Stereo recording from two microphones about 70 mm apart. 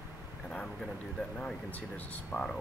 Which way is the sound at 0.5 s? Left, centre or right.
Centre.